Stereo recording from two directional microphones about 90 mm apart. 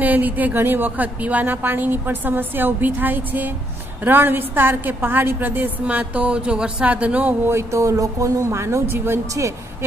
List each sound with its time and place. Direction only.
0.0 s a woman's voice: 20° right (ahead or behind)
7.5 s speech: 35° right (ahead or behind)